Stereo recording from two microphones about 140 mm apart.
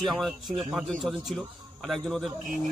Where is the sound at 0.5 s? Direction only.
35° right (ahead or behind).